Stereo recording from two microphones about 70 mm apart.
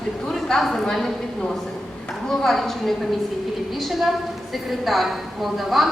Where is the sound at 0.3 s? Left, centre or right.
Centre.